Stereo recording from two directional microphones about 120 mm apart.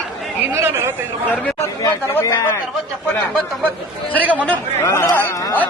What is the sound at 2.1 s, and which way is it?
Speech, 25° left (ahead or behind).